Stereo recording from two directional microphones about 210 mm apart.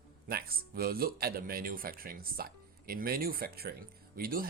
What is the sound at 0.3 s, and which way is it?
Speech, 45° right (ahead or behind).